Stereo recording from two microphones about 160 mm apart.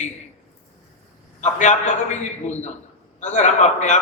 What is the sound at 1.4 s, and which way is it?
A man's voice, 50° left (ahead or behind).